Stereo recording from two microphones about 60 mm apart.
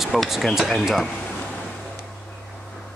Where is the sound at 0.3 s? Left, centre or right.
Centre.